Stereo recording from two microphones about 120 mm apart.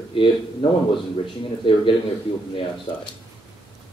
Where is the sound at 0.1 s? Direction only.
45° left (ahead or behind).